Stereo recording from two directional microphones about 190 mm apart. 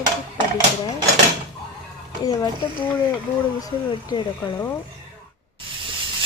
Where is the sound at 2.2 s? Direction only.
20° left (ahead or behind).